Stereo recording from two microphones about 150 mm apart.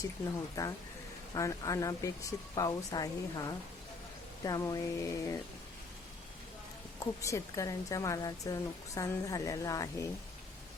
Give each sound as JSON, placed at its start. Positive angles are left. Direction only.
{"t": 0.6, "sound": "speech", "side_deg": 20}
{"t": 7.0, "sound": "speech", "side_deg": 20}